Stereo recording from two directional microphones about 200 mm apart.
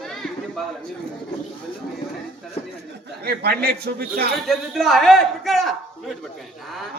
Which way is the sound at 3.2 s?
55° right (ahead or behind).